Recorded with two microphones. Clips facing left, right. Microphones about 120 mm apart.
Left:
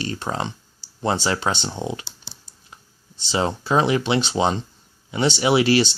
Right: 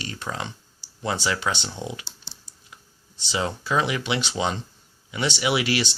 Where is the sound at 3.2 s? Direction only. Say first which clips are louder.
Left 5 dB; 30° left (ahead or behind).